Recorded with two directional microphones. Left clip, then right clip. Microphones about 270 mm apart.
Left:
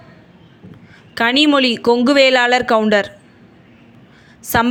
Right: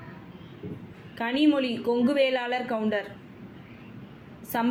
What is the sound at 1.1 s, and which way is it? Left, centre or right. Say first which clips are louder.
Speech: left 11 dB; left.